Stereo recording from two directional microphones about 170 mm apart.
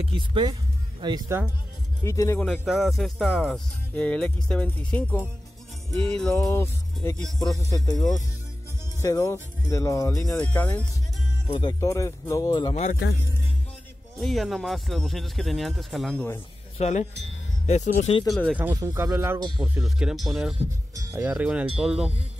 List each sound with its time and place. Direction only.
0.0 s speech: 30° right (ahead or behind)
2.0 s speech: 15° left (ahead or behind)
2.4 s speech: centre (ahead or behind)
6.5 s speech: 15° left (ahead or behind)
10.1 s speech: 5° left (ahead or behind); by 12.7 s 25° left (ahead or behind)
14.2 s speech: centre (ahead or behind)
16.7 s speech: 40° left (ahead or behind)
18.3 s speech: centre (ahead or behind)
18.6 s speech: 15° right (ahead or behind)
20.9 s speech: 20° right (ahead or behind)